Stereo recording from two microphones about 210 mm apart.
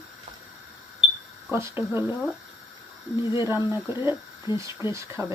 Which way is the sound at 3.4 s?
10° right (ahead or behind).